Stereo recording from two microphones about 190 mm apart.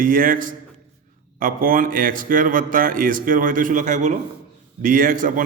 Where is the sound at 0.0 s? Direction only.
45° right (ahead or behind).